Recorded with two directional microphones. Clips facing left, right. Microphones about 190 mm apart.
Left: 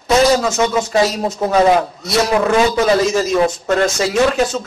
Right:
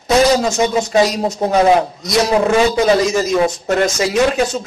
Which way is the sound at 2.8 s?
15° right (ahead or behind).